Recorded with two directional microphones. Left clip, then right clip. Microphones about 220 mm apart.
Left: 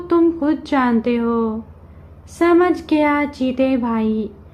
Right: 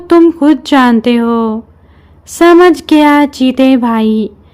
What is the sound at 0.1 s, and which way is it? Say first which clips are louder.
Speech: right 10 dB; 55° right (ahead or behind).